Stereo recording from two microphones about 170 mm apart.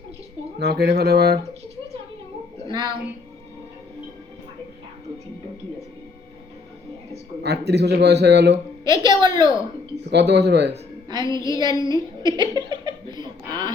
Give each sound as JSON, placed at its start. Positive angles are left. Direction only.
{"t": 0.6, "sound": "a man's voice", "side_deg": -70}
{"t": 2.6, "sound": "a woman's voice", "side_deg": -25}
{"t": 7.4, "sound": "a man's voice", "side_deg": -75}
{"t": 8.8, "sound": "a woman's voice", "side_deg": -25}
{"t": 10.1, "sound": "speech", "side_deg": -85}
{"t": 11.3, "sound": "a sound", "side_deg": 20}
{"t": 11.5, "sound": "a sound", "side_deg": -25}